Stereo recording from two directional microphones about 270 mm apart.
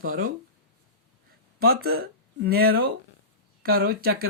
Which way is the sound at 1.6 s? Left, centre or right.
Right.